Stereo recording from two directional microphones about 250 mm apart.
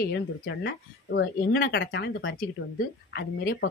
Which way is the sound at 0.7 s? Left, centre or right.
Left.